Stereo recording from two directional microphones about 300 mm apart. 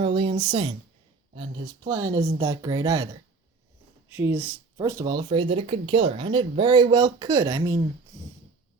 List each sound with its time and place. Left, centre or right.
0.0 s speech: centre
4.1 s speech: centre